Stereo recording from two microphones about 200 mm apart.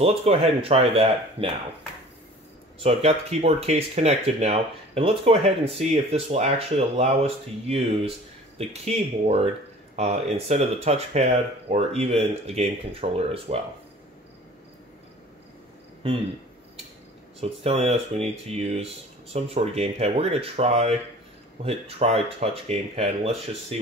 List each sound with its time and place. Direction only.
0.0 s speech: 30° right (ahead or behind)
2.8 s speech: 30° right (ahead or behind)
17.4 s speech: 30° right (ahead or behind)